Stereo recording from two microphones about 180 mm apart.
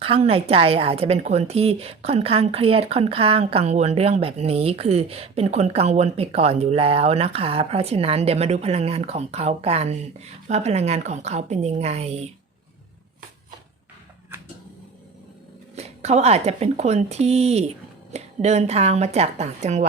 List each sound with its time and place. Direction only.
0.0 s speech: 30° right (ahead or behind)
15.7 s speech: 35° right (ahead or behind)